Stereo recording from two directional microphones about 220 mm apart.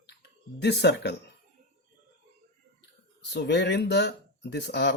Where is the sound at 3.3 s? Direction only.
50° left (ahead or behind).